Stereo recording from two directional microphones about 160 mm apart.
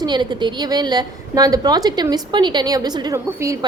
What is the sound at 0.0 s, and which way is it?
A woman's voice, 30° right (ahead or behind).